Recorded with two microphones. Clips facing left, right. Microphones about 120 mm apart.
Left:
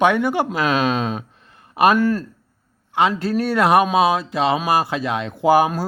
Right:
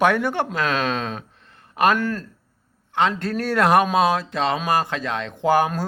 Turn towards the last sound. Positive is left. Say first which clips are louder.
# left 3 dB
turn(degrees=10)  # may be behind; listen again after turning